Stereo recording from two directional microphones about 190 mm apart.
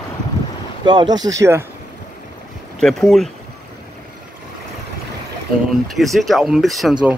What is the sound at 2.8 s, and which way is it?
Speech, centre (ahead or behind).